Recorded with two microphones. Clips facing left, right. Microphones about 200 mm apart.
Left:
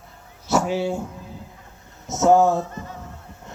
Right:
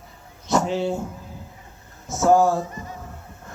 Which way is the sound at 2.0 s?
20° left (ahead or behind).